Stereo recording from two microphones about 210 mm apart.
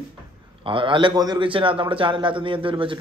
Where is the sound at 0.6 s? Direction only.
25° right (ahead or behind).